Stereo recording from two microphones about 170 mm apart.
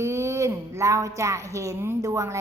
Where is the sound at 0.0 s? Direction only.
15° right (ahead or behind).